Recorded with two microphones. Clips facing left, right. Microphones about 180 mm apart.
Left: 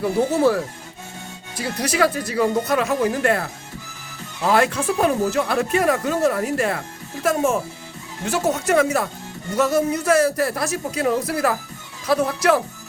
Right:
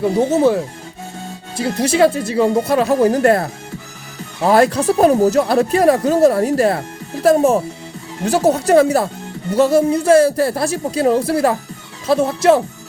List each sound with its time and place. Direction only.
0.0 s speech: 20° right (ahead or behind)